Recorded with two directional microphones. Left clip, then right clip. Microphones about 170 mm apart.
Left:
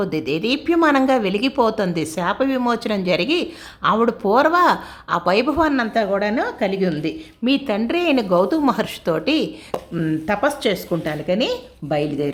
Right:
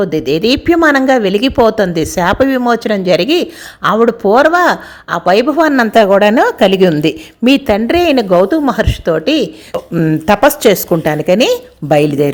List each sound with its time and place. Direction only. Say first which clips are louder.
0.0 s a woman's voice: right 9 dB; 15° right (ahead or behind)
5.7 s a woman's voice: right 11 dB; 40° right (ahead or behind); by 9.5 s 15° right (ahead or behind)
9.9 s a woman's voice: right 10 dB; 35° right (ahead or behind)
10.2 s a woman's voice: right 12 dB; 45° right (ahead or behind)